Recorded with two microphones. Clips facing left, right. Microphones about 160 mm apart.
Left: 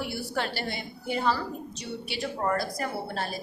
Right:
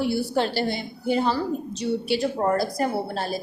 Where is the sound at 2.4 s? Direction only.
35° right (ahead or behind).